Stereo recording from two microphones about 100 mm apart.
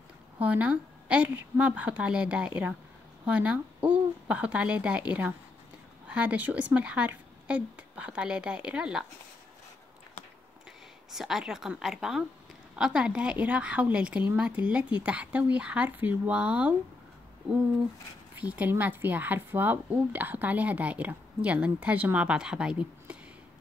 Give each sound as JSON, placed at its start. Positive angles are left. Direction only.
{"t": 0.4, "sound": "speech", "side_deg": -15}
{"t": 11.1, "sound": "a woman's voice", "side_deg": -5}
{"t": 18.3, "sound": "speech", "side_deg": -15}